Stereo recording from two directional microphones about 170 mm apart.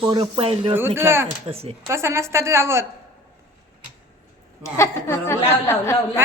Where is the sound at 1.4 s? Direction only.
35° right (ahead or behind).